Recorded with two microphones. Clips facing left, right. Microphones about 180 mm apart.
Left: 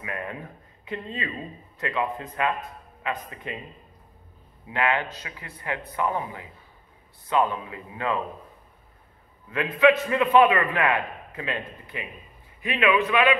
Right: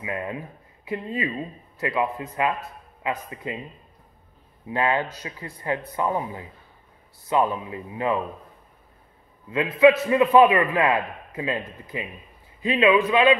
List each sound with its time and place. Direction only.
0.0 s a man's voice: 20° right (ahead or behind)
4.6 s speech: 20° right (ahead or behind)
5.2 s speech: 30° right (ahead or behind)
5.7 s a man's voice: 20° right (ahead or behind)
9.5 s a man's voice: 25° right (ahead or behind)
12.6 s a man's voice: 20° right (ahead or behind)